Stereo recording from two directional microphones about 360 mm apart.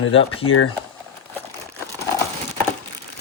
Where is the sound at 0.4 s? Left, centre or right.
Left.